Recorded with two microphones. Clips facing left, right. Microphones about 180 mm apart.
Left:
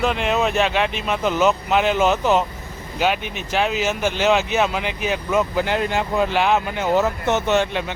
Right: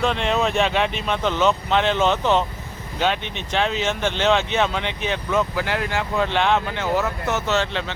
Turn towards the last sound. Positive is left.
turn(degrees=15)  # may be behind; listen again after turning